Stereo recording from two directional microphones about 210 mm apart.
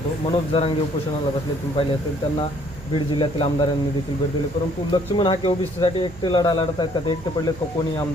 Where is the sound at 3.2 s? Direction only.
25° left (ahead or behind).